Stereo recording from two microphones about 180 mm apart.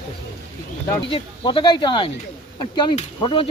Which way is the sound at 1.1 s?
30° left (ahead or behind).